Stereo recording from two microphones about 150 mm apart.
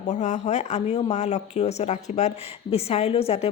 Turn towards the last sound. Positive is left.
turn(degrees=40)  # may be behind; listen again after turning